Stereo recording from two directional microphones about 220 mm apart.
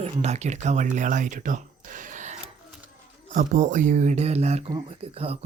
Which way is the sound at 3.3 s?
35° right (ahead or behind).